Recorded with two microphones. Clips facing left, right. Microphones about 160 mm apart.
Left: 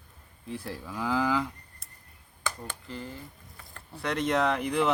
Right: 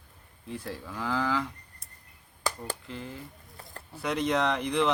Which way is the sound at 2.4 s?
35° right (ahead or behind).